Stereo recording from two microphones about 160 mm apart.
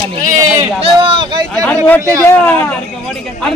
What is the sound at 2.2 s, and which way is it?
Speech, 15° left (ahead or behind).